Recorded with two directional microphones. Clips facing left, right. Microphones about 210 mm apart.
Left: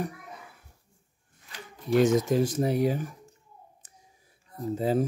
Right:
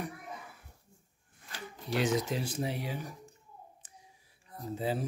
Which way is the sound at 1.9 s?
45° left (ahead or behind).